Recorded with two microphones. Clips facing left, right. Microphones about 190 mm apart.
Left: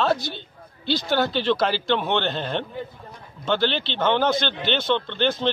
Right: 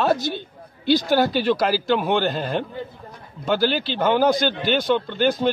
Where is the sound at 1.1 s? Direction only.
10° right (ahead or behind).